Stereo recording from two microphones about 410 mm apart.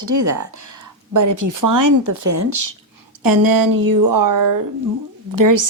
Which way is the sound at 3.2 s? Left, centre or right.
Right.